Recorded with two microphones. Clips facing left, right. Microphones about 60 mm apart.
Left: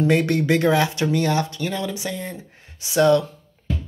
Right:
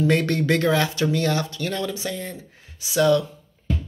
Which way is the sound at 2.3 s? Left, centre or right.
Left.